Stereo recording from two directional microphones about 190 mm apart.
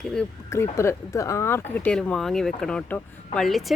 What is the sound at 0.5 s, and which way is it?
Speech, 15° left (ahead or behind).